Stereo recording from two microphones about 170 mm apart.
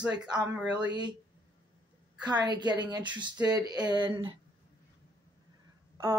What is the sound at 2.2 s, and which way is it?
Speech, 25° right (ahead or behind).